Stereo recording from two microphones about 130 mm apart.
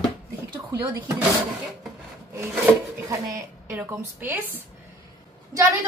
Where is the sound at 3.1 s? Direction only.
20° right (ahead or behind).